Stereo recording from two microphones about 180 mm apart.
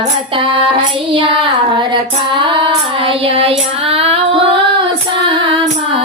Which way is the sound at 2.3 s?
25° right (ahead or behind).